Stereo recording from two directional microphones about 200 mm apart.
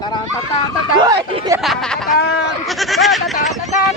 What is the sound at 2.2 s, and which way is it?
Speech, 60° left (ahead or behind).